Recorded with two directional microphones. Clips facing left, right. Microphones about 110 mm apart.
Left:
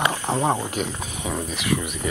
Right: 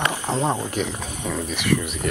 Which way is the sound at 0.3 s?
15° left (ahead or behind).